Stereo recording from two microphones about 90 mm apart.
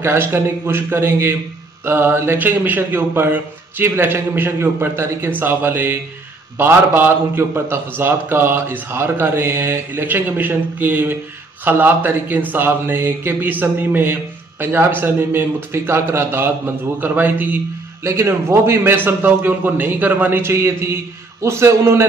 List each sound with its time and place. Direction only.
0.0 s speech: 30° right (ahead or behind)